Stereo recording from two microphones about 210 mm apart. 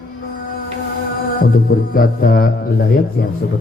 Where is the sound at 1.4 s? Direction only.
45° left (ahead or behind).